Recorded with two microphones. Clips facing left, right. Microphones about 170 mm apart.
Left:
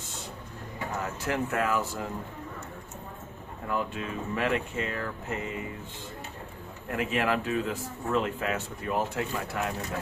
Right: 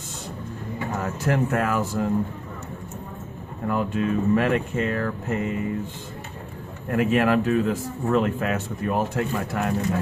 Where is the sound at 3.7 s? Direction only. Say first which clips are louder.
Right 8 dB; 50° right (ahead or behind).